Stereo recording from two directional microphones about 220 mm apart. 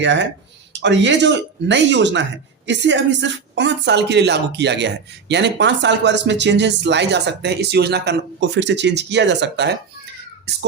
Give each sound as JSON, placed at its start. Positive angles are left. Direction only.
{"t": 0.0, "sound": "speech", "side_deg": -55}